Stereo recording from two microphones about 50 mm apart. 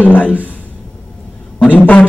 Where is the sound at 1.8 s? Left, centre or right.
Left.